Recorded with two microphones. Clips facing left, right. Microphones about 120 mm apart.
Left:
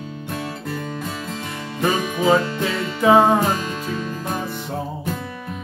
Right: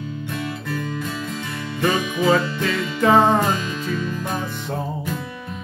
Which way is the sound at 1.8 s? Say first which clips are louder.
Even; 35° left (ahead or behind).